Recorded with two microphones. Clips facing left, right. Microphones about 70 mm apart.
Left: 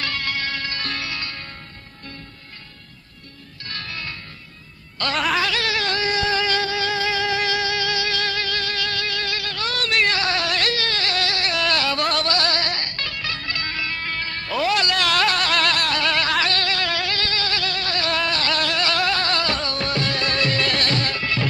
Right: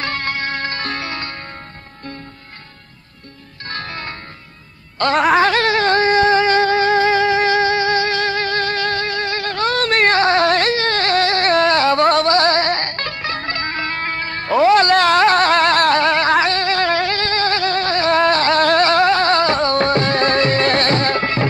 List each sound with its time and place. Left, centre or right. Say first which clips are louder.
0.0 s music: right 4 dB; right
3.6 s music: right 5 dB; right
5.1 s a sound: right 8 dB; right
5.4 s music: right 9 dB; right